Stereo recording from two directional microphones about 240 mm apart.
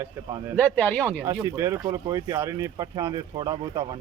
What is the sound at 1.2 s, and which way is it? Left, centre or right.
Speech, centre.